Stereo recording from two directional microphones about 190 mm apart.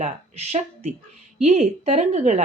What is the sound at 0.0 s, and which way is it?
A woman's voice, 35° right (ahead or behind).